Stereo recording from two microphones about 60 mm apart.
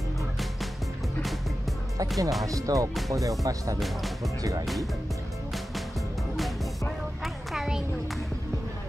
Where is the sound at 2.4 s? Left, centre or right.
Right.